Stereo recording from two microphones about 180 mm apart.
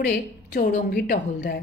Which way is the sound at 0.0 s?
60° left (ahead or behind).